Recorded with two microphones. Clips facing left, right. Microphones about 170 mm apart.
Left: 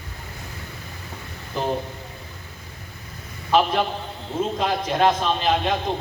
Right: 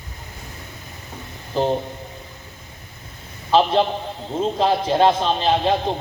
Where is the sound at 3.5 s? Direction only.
30° right (ahead or behind).